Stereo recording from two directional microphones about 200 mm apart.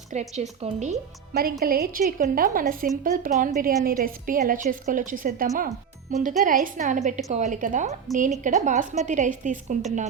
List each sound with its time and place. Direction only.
0.1 s a woman's voice: 35° right (ahead or behind)
1.3 s a woman's voice: 50° right (ahead or behind); by 10.1 s 35° right (ahead or behind)